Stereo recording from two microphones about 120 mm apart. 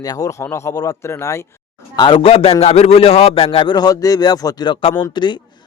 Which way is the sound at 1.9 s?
45° left (ahead or behind).